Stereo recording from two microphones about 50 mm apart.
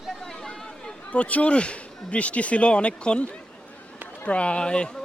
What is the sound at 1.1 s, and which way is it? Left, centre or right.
Speech, left.